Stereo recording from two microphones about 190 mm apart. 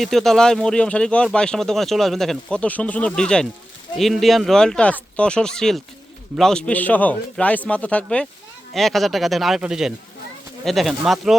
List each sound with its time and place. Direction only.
0.0 s speech: centre (ahead or behind)